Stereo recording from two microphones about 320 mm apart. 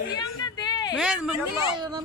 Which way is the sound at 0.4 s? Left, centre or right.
Centre.